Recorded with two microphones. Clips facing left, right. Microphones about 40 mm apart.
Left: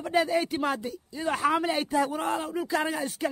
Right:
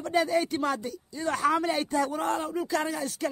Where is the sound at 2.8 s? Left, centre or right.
Centre.